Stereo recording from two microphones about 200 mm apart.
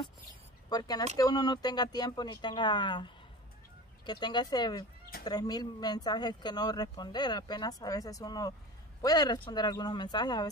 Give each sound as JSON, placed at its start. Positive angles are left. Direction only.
{"t": 0.7, "sound": "speech", "side_deg": 20}